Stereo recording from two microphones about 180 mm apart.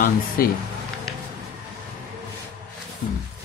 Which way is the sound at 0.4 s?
55° left (ahead or behind).